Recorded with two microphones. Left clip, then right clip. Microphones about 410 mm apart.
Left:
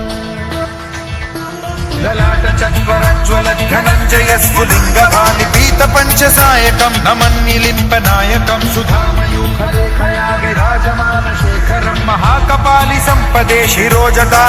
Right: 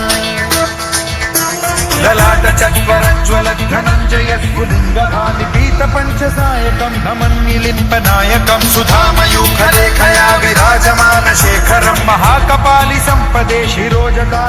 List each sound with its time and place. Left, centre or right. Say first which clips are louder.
2.0 s music: right 5 dB; right
2.9 s music: right 1 dB; centre
5.1 s music: left 5 dB; left
7.2 s music: left 4 dB; centre
10.0 s music: right 5 dB; right
11.7 s music: right 4 dB; right; by 14.3 s left